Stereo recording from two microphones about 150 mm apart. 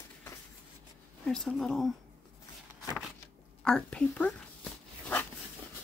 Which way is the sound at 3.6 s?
5° left (ahead or behind).